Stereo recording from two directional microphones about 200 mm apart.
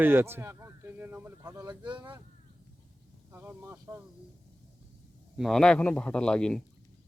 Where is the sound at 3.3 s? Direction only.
10° right (ahead or behind).